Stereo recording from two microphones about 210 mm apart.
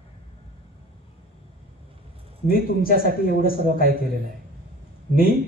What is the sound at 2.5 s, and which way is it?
Speech, 45° left (ahead or behind).